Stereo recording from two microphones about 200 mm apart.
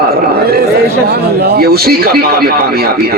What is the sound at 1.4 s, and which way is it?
Speech, 50° right (ahead or behind).